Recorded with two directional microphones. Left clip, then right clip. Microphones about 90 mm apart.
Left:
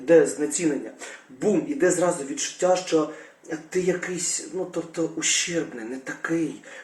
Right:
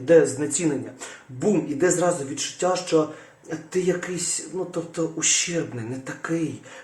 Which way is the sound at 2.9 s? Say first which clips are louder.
Right 2 dB; 45° right (ahead or behind).